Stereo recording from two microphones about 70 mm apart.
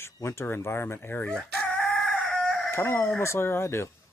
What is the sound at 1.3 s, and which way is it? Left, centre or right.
Chicken, left.